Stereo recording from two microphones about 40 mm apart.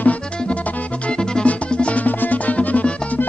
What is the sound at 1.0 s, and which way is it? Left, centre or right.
Music, left.